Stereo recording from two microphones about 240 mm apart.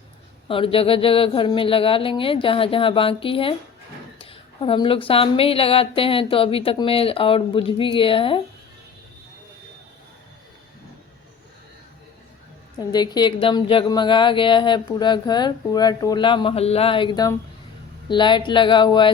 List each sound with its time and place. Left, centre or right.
0.4 s a woman's voice: left
12.9 s a woman's voice: centre